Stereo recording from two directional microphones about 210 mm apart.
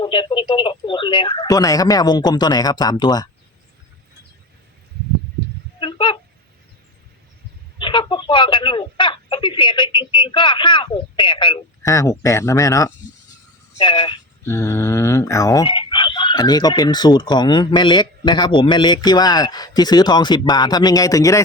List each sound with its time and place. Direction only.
0.0 s speech: 25° left (ahead or behind)
5.8 s a sound: 20° left (ahead or behind)
7.8 s speech: 25° left (ahead or behind)